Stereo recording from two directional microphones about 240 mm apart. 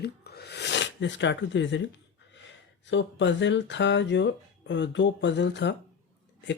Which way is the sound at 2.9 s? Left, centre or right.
Left.